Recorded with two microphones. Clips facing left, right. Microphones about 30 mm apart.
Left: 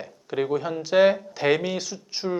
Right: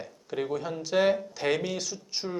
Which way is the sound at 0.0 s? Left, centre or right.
Centre.